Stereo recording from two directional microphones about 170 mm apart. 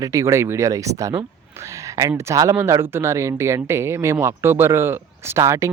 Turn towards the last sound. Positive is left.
turn(degrees=-15)  # may be behind; listen again after turning